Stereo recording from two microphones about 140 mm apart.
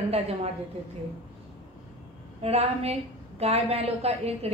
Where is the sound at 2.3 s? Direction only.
45° right (ahead or behind).